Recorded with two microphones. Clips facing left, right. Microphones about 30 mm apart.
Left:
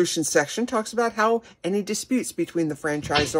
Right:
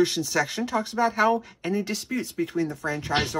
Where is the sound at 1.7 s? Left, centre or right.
Right.